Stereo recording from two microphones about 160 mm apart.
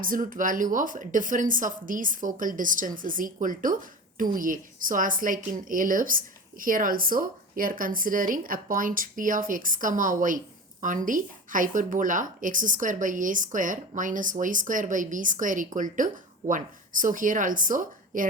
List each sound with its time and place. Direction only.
0.0 s a woman's voice: 60° right (ahead or behind)